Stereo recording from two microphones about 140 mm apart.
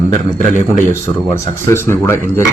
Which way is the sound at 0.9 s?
20° left (ahead or behind).